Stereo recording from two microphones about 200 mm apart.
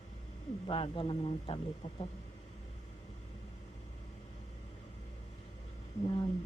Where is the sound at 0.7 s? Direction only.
25° left (ahead or behind).